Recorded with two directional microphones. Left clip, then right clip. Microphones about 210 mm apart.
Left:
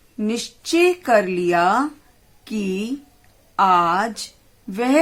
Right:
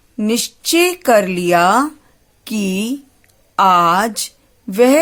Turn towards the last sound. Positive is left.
turn(degrees=-50)  # may be behind; listen again after turning